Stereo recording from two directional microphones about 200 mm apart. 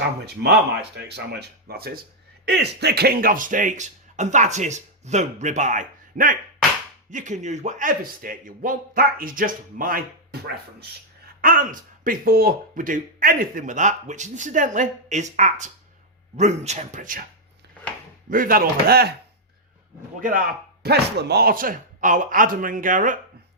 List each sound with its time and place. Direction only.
0.3 s speech: 55° right (ahead or behind)
11.3 s speech: 45° right (ahead or behind)
18.3 s speech: 45° right (ahead or behind)
20.8 s speech: 55° right (ahead or behind)